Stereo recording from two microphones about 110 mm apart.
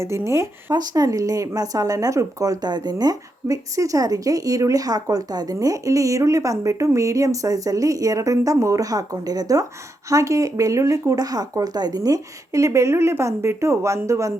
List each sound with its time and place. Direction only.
0.0 s speech: 25° right (ahead or behind)
0.7 s speech: 35° right (ahead or behind)